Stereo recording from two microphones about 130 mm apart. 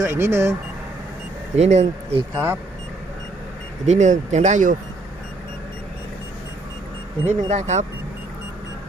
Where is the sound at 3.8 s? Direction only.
65° right (ahead or behind).